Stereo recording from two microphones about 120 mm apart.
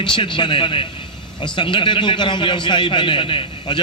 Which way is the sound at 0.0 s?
40° left (ahead or behind).